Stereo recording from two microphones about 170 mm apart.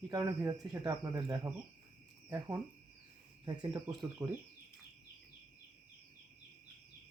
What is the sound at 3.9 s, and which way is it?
Speech, 10° right (ahead or behind).